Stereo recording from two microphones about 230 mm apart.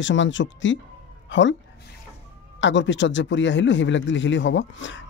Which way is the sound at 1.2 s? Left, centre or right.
Left.